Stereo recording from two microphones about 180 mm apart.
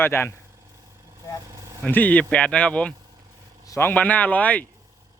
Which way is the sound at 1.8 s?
10° left (ahead or behind).